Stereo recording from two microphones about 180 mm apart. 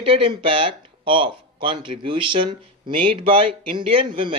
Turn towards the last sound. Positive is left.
turn(degrees=-30)  # may be behind; listen again after turning